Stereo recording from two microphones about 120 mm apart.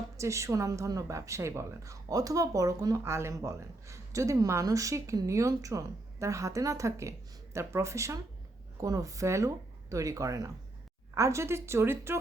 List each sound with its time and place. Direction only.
0.2 s a woman's voice: 25° right (ahead or behind)